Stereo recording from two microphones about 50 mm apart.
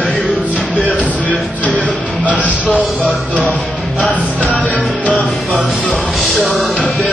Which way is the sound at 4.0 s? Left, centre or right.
Left.